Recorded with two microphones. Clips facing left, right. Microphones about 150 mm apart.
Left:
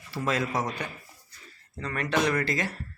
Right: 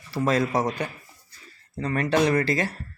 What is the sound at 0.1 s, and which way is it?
Speech, 35° right (ahead or behind).